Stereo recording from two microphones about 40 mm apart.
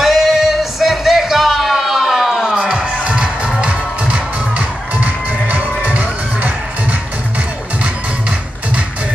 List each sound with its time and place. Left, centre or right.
0.0 s music: centre
2.5 s music: right
2.9 s music: right